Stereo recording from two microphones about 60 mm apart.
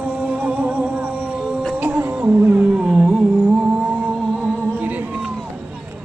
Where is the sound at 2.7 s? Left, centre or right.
Centre; by 5.0 s right.